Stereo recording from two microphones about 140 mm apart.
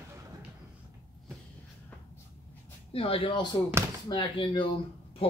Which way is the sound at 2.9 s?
40° left (ahead or behind).